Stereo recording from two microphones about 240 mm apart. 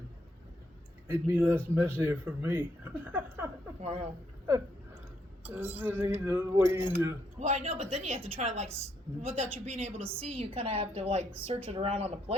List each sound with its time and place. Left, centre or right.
1.1 s speech: centre
3.8 s a woman's voice: right
5.5 s speech: centre
7.3 s a woman's voice: right